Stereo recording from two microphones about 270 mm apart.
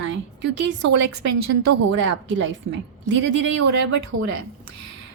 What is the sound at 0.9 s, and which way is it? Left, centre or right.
Speech, right.